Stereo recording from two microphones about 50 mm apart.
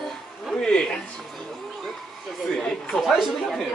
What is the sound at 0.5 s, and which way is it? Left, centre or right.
Speech, centre.